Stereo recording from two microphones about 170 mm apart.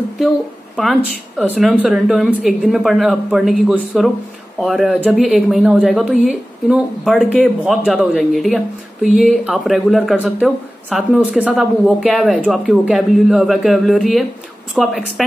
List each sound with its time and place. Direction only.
1.4 s a woman's voice: 5° right (ahead or behind)